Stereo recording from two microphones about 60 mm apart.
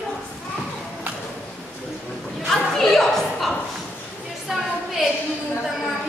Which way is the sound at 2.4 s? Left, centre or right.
Centre.